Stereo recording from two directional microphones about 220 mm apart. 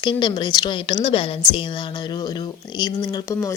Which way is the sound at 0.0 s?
20° left (ahead or behind).